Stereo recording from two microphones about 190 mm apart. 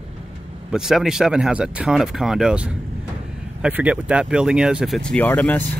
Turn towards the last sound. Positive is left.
turn(degrees=10)  # may be behind; listen again after turning